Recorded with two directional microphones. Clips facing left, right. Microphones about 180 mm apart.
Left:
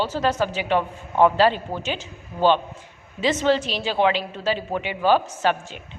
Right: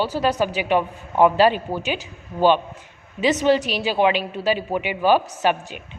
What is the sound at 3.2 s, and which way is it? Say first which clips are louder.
A woman's voice: right 2 dB; 15° right (ahead or behind).